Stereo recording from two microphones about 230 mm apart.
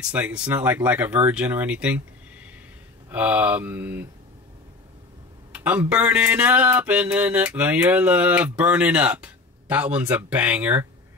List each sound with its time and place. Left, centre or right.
0.0 s speech: centre
3.1 s speech: centre
5.5 s speech: centre